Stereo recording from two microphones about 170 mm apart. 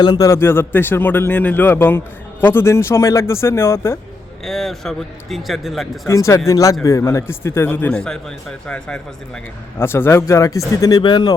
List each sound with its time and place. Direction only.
0.0 s a man's voice: 20° left (ahead or behind)
4.4 s a man's voice: centre (ahead or behind)
6.1 s a man's voice: 15° left (ahead or behind)